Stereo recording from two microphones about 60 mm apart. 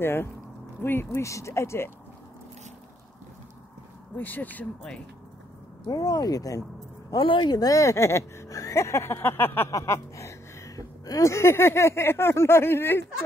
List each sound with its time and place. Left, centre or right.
0.0 s speech: left
1.2 s speech: left
4.2 s speech: left
5.9 s speech: left
9.7 s a sound: left
11.3 s speech: left